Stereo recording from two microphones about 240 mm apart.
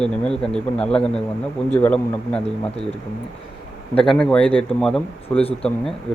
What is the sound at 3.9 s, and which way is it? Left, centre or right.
Speech, centre.